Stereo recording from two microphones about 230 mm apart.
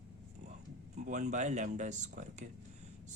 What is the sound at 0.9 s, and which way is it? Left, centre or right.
Speech, right.